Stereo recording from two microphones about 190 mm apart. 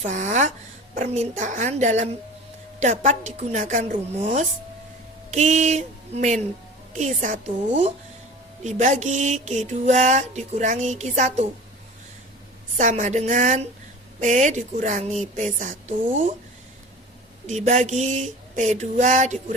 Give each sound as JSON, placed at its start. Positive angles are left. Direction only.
{"t": 0.0, "sound": "mantra", "side_deg": -40}
{"t": 12.7, "sound": "mantra", "side_deg": -40}
{"t": 17.4, "sound": "mantra", "side_deg": -40}